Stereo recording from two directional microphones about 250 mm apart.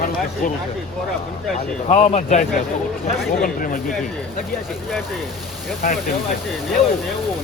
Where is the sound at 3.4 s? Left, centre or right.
Left.